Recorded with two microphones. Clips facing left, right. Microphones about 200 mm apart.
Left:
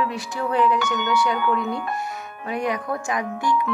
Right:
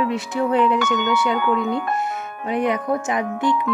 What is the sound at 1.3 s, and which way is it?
Speech, 55° right (ahead or behind).